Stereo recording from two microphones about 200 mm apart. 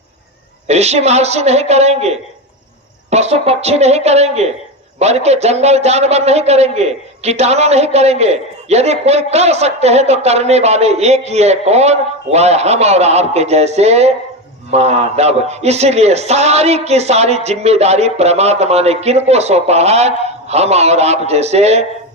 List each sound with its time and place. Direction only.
0.7 s a man's voice: 35° right (ahead or behind)